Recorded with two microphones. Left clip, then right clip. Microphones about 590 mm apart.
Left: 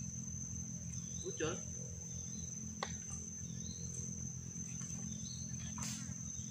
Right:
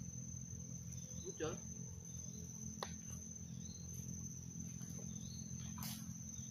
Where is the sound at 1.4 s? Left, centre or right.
Right.